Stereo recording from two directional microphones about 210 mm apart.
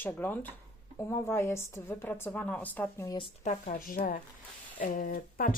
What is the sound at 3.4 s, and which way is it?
Speech, 35° left (ahead or behind).